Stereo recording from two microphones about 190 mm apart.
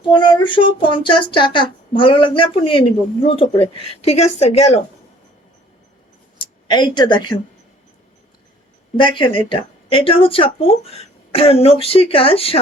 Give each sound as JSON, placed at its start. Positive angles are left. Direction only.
{"t": 0.1, "sound": "speech", "side_deg": 25}
{"t": 6.7, "sound": "speech", "side_deg": 25}
{"t": 9.0, "sound": "speech", "side_deg": 25}